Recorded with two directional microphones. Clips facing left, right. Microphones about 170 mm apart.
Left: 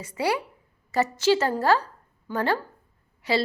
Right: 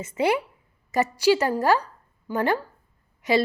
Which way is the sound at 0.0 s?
20° right (ahead or behind).